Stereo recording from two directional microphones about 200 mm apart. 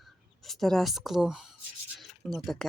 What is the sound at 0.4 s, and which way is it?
Speech, centre (ahead or behind).